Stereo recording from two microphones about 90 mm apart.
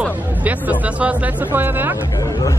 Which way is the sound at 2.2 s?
35° left (ahead or behind).